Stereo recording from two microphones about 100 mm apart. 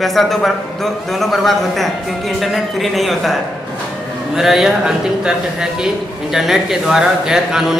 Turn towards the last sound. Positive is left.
turn(degrees=-5)  # may be behind; listen again after turning